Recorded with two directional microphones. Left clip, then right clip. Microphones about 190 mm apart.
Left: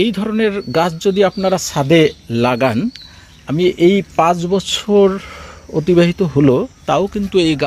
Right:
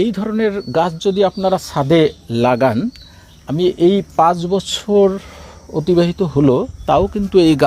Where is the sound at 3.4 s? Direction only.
15° left (ahead or behind).